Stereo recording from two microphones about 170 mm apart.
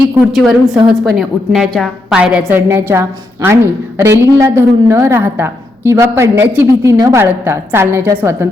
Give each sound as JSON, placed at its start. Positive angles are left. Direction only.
{"t": 0.3, "sound": "a woman's voice", "side_deg": 0}